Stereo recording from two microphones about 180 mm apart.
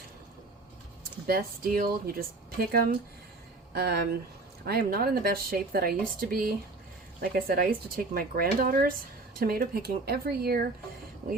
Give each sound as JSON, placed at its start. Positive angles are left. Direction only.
{"t": 1.3, "sound": "speech", "side_deg": -55}